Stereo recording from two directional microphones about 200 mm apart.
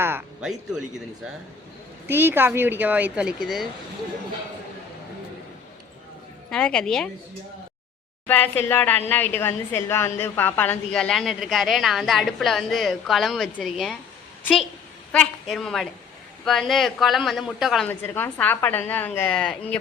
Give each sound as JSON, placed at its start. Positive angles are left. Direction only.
{"t": 0.0, "sound": "a woman's voice", "side_deg": -10}
{"t": 2.0, "sound": "speech", "side_deg": -10}
{"t": 6.5, "sound": "a woman's voice", "side_deg": 5}
{"t": 8.3, "sound": "a woman's voice", "side_deg": 10}
{"t": 15.1, "sound": "a woman's voice", "side_deg": 5}
{"t": 17.8, "sound": "a woman's voice", "side_deg": 10}